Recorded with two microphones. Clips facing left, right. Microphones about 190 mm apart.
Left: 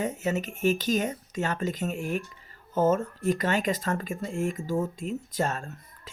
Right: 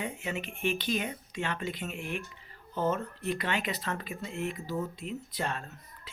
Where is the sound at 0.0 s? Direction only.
45° left (ahead or behind).